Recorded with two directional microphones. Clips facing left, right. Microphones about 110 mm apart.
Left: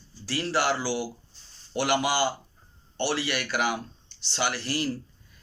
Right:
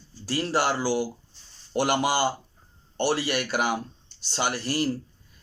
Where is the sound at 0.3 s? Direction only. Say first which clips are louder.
Right 1 dB; 40° right (ahead or behind).